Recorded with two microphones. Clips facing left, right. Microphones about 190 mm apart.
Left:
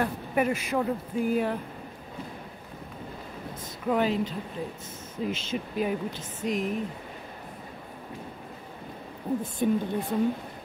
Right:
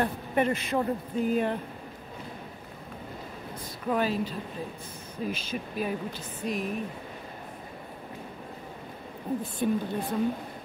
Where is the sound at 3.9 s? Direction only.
20° left (ahead or behind).